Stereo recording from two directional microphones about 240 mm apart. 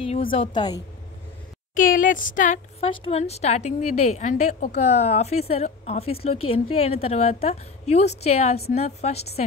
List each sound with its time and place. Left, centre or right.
0.3 s a woman's voice: left
1.8 s a woman's voice: left